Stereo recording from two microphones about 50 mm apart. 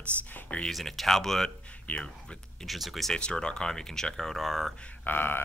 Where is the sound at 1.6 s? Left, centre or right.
Left.